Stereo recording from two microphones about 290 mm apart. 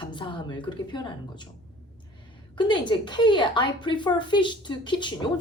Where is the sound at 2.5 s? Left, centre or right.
Centre.